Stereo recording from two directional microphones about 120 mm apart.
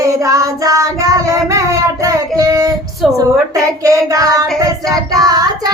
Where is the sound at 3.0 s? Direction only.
5° right (ahead or behind).